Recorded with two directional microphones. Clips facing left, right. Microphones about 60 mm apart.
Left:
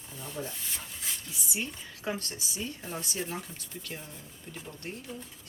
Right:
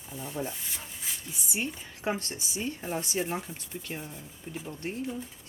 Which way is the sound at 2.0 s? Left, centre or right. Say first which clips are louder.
Right 3 dB; right.